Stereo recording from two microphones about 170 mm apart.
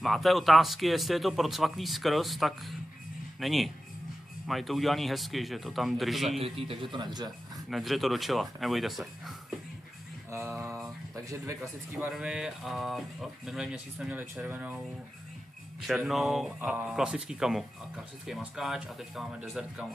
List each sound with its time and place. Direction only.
0.0 s speech: centre (ahead or behind)
6.4 s speech: 30° right (ahead or behind)
7.5 s speech: centre (ahead or behind)
12.1 s speech: 5° right (ahead or behind)
15.9 s speech: centre (ahead or behind)